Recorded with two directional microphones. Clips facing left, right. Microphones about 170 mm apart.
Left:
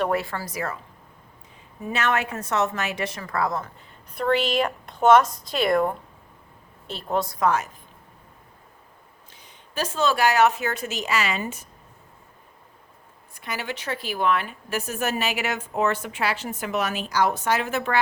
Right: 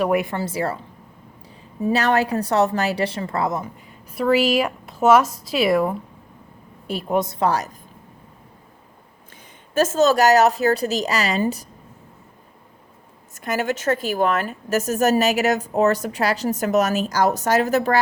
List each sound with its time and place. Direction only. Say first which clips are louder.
0.0 s a woman's voice: right 5 dB; 15° right (ahead or behind)
1.8 s a woman's voice: right 6 dB; 35° right (ahead or behind)
4.1 s a woman's voice: right 5 dB; 5° right (ahead or behind); by 7.7 s 35° right (ahead or behind)
9.3 s speech: right 11 dB; 45° right (ahead or behind)
13.3 s a woman's voice: right 9 dB; 45° right (ahead or behind)